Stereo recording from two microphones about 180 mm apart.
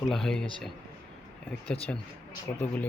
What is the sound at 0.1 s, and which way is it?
Speech, 5° left (ahead or behind).